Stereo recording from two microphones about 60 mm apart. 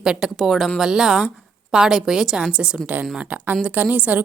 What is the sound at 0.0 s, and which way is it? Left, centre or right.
A woman's voice, centre.